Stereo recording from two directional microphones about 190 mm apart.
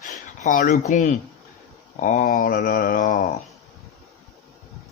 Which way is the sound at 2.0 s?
45° left (ahead or behind).